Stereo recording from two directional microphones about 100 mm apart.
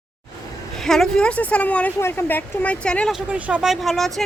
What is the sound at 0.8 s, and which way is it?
A woman's voice, 5° left (ahead or behind).